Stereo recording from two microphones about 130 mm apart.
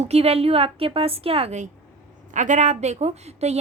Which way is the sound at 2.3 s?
70° right (ahead or behind).